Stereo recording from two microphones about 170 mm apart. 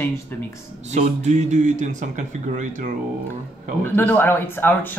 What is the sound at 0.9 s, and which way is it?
Speech, 40° right (ahead or behind).